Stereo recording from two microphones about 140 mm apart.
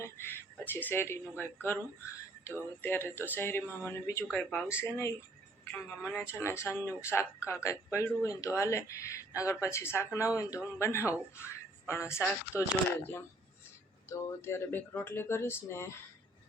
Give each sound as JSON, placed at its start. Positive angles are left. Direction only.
{"t": 0.0, "sound": "a sound", "side_deg": 15}
{"t": 1.4, "sound": "speech", "side_deg": 15}
{"t": 6.1, "sound": "speech", "side_deg": 20}